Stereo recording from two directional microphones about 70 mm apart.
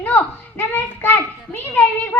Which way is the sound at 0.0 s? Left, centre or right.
Left.